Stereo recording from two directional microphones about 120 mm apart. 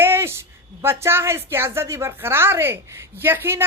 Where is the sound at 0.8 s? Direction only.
20° right (ahead or behind).